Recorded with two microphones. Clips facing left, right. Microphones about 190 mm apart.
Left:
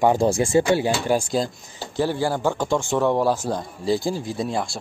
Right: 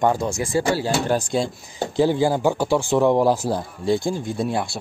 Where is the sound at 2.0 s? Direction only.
15° right (ahead or behind).